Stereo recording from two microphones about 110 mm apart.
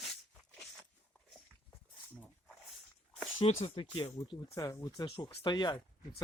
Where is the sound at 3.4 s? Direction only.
65° left (ahead or behind).